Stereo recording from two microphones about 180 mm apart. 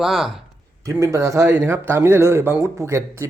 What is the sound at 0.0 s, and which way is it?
Speech, centre (ahead or behind).